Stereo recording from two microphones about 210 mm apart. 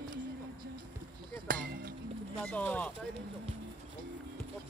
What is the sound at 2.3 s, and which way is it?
Speech, 5° left (ahead or behind).